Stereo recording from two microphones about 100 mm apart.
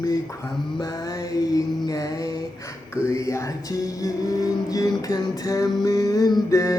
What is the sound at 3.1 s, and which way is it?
Music, 30° left (ahead or behind).